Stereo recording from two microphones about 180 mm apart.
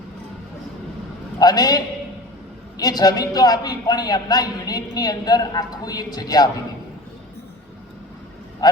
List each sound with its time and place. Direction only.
1.4 s a woman's voice: 20° left (ahead or behind)